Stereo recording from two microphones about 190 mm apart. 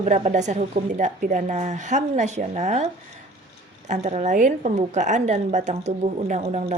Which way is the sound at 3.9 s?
35° right (ahead or behind).